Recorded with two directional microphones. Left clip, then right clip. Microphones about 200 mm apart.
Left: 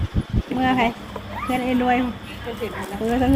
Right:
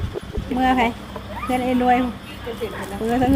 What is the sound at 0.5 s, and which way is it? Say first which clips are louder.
Speech: right 2 dB; 5° right (ahead or behind).